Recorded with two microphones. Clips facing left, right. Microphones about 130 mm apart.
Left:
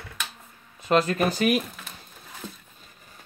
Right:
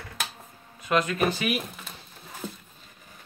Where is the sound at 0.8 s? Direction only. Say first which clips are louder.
Left 2 dB; 35° left (ahead or behind).